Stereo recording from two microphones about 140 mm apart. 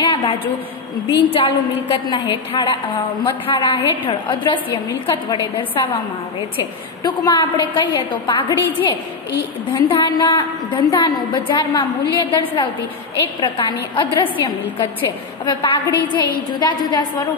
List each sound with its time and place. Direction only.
1.0 s a woman's voice: 40° left (ahead or behind)
7.0 s a woman's voice: 30° left (ahead or behind)